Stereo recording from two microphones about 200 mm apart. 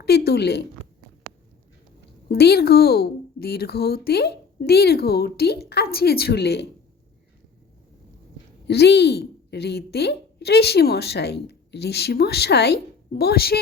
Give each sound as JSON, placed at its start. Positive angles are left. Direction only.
{"t": 0.0, "sound": "a woman's voice", "side_deg": 55}
{"t": 2.3, "sound": "a woman's voice", "side_deg": 50}
{"t": 8.6, "sound": "speech", "side_deg": 55}